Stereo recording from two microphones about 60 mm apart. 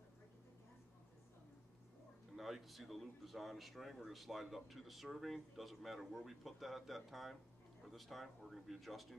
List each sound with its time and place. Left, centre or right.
2.3 s speech: centre